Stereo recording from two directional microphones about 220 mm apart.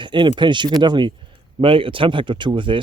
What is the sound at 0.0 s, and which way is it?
A man's voice, 20° right (ahead or behind).